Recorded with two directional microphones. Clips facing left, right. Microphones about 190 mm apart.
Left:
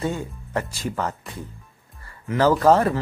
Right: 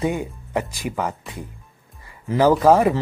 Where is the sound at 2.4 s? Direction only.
10° right (ahead or behind).